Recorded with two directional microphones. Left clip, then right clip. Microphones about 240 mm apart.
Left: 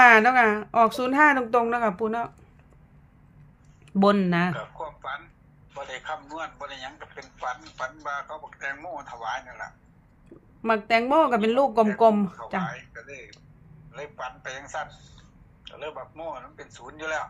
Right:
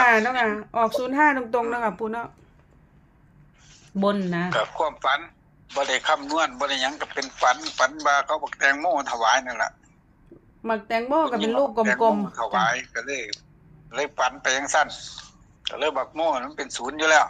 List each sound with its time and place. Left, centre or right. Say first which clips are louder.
0.0 s speech: left 3 dB; centre
3.9 s speech: left 3 dB; centre
4.5 s a man's voice: right 12 dB; right
10.6 s speech: left 3 dB; centre
12.6 s a man's voice: right 12 dB; right